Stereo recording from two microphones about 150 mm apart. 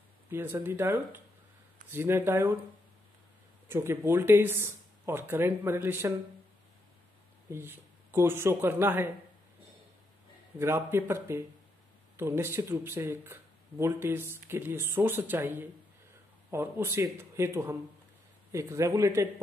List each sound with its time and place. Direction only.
0.3 s speech: 15° right (ahead or behind)
3.6 s speech: 15° right (ahead or behind)
7.4 s speech: 15° right (ahead or behind)
10.6 s speech: 15° right (ahead or behind)